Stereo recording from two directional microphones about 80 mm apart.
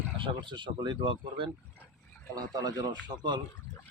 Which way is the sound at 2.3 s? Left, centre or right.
Right.